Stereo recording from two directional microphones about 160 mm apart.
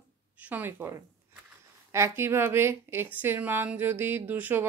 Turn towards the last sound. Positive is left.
turn(degrees=-10)  # may be behind; listen again after turning